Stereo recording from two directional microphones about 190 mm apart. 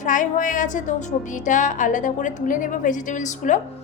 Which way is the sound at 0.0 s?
45° left (ahead or behind).